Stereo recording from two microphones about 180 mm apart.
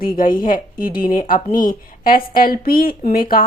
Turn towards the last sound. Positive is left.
turn(degrees=55)  # may be behind; listen again after turning